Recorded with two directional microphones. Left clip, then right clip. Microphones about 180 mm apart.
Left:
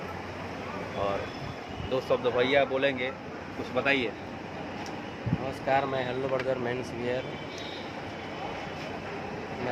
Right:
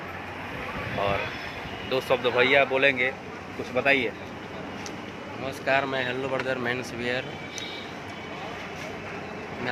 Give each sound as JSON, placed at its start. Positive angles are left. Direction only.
{"t": 1.9, "sound": "speech", "side_deg": -15}
{"t": 5.6, "sound": "speech", "side_deg": 5}